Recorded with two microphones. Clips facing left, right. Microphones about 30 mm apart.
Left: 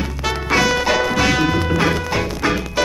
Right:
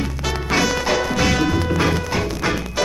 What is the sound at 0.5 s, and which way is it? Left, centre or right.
Music, centre.